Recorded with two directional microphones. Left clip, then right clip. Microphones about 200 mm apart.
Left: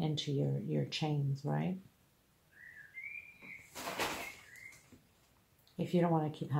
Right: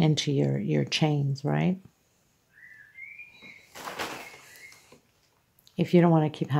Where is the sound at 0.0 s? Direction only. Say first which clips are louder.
Right 11 dB; 45° right (ahead or behind).